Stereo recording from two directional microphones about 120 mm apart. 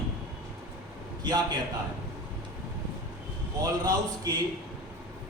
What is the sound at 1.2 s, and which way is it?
Speech, 35° right (ahead or behind).